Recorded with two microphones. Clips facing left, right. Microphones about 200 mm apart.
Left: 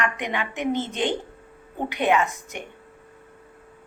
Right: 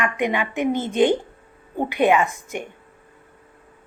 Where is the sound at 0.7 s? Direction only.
45° right (ahead or behind).